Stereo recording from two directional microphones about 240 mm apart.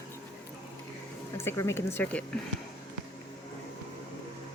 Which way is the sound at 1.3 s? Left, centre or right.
Centre.